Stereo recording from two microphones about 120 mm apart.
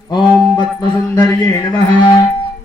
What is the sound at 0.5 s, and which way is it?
Music, 35° left (ahead or behind).